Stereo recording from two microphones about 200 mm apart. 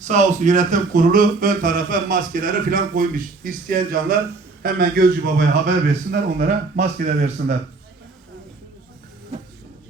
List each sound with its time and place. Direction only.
0.0 s speech: 35° right (ahead or behind)